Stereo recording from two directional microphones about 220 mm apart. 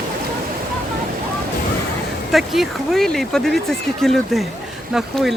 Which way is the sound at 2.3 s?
Centre (ahead or behind).